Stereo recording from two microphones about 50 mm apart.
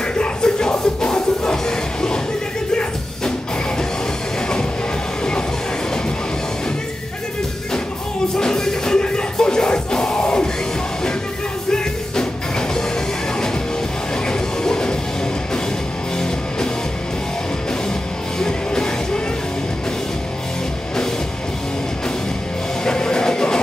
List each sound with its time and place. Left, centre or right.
0.0 s music: centre
8.4 s music: centre
11.7 s music: centre
14.2 s train: centre
18.4 s music: centre
22.8 s music: centre